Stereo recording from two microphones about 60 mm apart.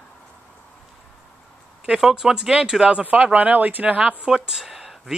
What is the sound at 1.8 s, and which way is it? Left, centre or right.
Speech, centre.